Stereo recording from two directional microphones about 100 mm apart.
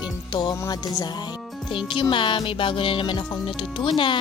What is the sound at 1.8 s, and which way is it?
Speech, 55° left (ahead or behind).